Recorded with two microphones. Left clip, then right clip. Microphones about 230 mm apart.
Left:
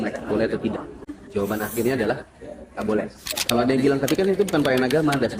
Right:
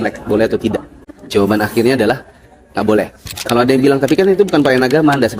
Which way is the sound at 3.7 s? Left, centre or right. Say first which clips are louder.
Right 9 dB; right.